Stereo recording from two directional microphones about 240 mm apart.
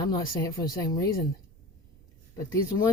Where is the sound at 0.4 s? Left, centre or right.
Centre.